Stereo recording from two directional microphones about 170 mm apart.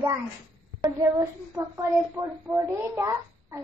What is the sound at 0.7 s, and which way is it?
A woman's voice, 20° right (ahead or behind).